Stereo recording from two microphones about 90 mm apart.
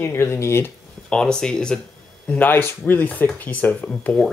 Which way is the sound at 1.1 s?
10° left (ahead or behind).